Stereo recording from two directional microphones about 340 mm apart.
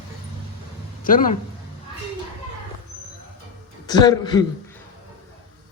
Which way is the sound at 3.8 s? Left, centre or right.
Centre.